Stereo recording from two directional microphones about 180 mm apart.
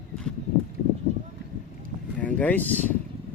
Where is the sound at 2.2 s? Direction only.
10° left (ahead or behind).